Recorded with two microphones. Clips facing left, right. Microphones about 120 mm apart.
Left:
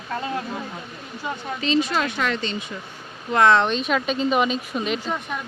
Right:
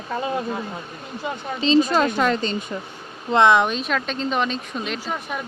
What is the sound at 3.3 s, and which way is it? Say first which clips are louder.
Speech: right 1 dB; 20° right (ahead or behind).